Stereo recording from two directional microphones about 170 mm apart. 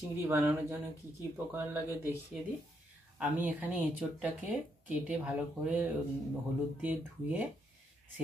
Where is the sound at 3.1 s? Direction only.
10° right (ahead or behind).